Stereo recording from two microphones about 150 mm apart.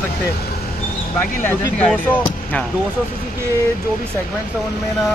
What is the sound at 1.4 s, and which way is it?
Speech, 10° left (ahead or behind).